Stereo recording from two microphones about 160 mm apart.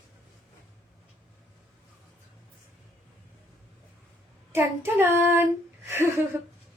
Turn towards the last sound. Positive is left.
turn(degrees=-15)  # may be behind; listen again after turning